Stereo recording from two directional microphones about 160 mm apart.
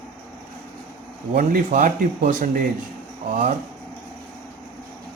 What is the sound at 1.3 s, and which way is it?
Speech, 60° right (ahead or behind).